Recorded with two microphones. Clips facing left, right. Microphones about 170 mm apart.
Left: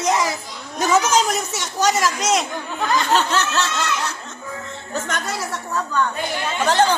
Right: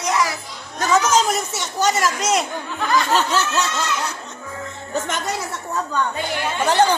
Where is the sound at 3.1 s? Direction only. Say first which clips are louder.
Even; 10° right (ahead or behind).